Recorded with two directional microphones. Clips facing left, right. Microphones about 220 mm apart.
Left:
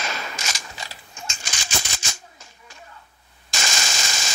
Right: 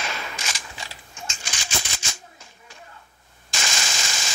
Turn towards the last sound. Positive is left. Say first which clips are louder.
# left 1 dB
turn(degrees=40)  # may be behind; listen again after turning